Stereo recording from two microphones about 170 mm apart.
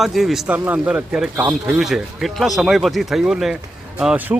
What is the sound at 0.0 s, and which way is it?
A man's voice, centre (ahead or behind).